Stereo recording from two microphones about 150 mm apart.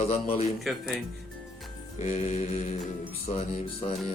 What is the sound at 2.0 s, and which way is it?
Speech, 50° left (ahead or behind).